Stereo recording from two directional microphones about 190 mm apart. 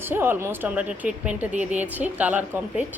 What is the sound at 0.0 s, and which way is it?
A woman's voice, 10° right (ahead or behind).